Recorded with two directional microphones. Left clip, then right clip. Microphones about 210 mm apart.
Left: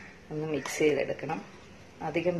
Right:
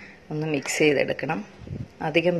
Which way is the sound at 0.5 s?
25° right (ahead or behind).